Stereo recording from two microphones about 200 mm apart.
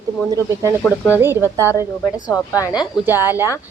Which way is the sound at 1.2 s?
10° right (ahead or behind).